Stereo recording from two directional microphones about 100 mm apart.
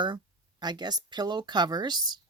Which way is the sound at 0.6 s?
45° right (ahead or behind).